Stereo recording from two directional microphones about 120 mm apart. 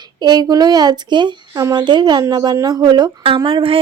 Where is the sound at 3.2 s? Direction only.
50° right (ahead or behind).